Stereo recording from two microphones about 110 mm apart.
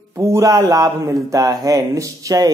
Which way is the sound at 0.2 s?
30° right (ahead or behind).